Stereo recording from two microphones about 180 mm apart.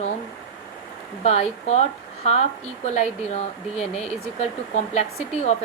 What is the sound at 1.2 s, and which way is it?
Speech, 35° left (ahead or behind).